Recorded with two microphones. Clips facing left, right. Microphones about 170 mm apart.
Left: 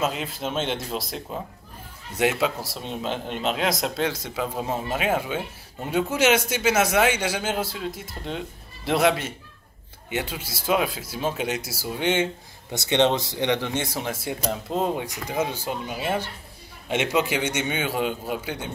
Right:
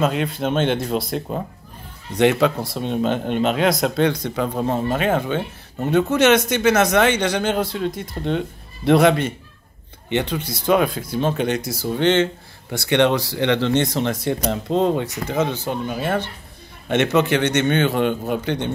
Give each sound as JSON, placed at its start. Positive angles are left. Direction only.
{"t": 0.0, "sound": "speech", "side_deg": 0}
{"t": 2.9, "sound": "speech", "side_deg": -50}
{"t": 3.4, "sound": "a man's voice", "side_deg": 0}
{"t": 12.7, "sound": "a man's voice", "side_deg": 20}